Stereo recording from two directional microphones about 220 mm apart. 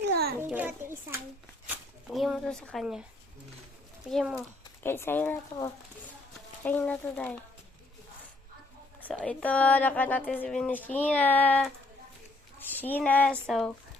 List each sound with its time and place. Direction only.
0.0 s a sound: 45° right (ahead or behind)
0.3 s a child's voice: 10° right (ahead or behind)
4.1 s speech: centre (ahead or behind)
4.8 s a woman's voice: 10° left (ahead or behind)
9.0 s a woman's voice: 5° left (ahead or behind)